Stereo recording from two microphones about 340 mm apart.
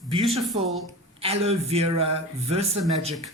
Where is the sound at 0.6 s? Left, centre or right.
Centre.